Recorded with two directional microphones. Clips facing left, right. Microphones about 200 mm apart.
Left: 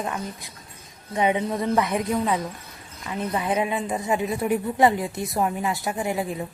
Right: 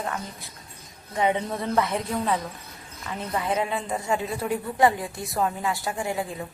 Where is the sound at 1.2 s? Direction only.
15° left (ahead or behind).